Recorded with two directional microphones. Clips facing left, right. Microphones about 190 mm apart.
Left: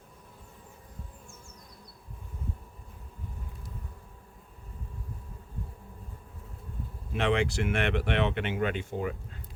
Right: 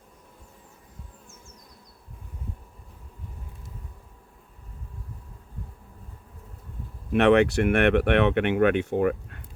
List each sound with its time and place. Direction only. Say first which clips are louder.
7.1 s speech: right 9 dB; 65° right (ahead or behind)